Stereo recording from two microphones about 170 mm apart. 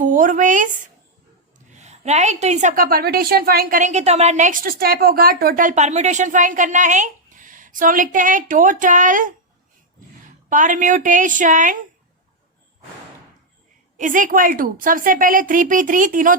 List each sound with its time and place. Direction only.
0.0 s a woman's voice: 50° right (ahead or behind)
10.5 s a woman's voice: 50° right (ahead or behind)
13.9 s a woman's voice: 50° right (ahead or behind)